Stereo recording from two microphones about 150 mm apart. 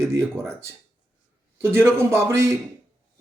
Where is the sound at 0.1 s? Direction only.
15° right (ahead or behind).